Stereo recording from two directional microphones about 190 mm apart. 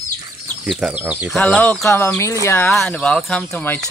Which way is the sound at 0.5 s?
Centre (ahead or behind).